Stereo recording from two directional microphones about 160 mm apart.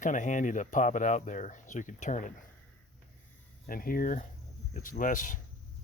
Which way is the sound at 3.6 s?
65° left (ahead or behind).